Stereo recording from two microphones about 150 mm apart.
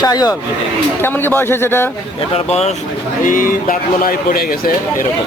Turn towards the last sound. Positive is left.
turn(degrees=80)